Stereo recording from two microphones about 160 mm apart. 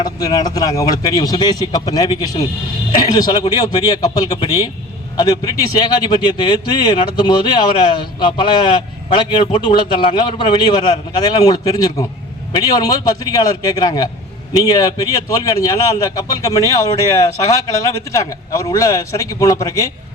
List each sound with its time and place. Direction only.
0.0 s a man's voice: 25° left (ahead or behind)
9.0 s a man's voice: 35° left (ahead or behind)